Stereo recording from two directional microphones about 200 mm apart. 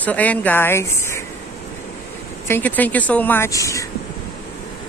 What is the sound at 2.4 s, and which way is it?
A woman's voice, 10° left (ahead or behind).